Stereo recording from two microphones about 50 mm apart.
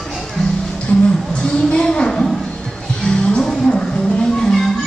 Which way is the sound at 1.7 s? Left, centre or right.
Centre.